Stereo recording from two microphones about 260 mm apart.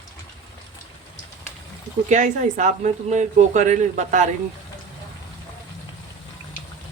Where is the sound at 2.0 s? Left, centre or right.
Right.